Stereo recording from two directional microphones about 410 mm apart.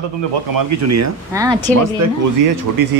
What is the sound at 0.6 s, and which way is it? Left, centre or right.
Speech, right.